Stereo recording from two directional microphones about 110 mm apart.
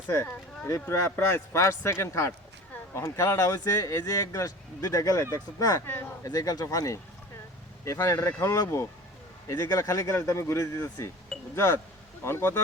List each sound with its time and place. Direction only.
0.1 s speech: 20° left (ahead or behind)
6.3 s speech: 35° left (ahead or behind)